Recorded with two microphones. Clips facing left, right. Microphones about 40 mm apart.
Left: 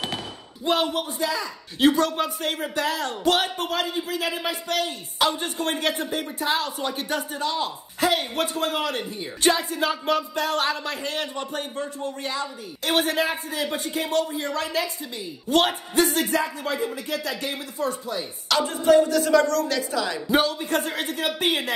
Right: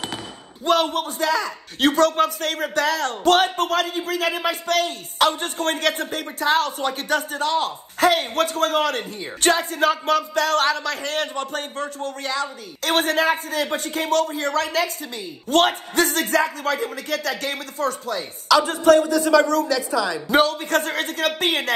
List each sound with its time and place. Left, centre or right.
0.8 s speech: right
18.7 s a sound: right
20.2 s speech: right
20.6 s speech: right